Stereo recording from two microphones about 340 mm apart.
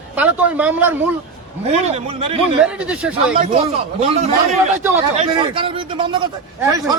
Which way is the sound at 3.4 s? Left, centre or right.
Centre.